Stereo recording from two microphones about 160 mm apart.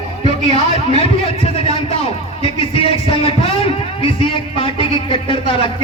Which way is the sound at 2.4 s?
35° left (ahead or behind).